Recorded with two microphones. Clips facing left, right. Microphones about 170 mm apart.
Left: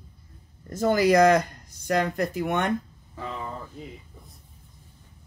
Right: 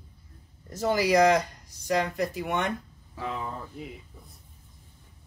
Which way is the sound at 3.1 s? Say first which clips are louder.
Right 1 dB; 5° right (ahead or behind).